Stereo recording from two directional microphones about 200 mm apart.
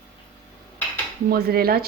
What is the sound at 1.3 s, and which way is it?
Speech, 50° right (ahead or behind).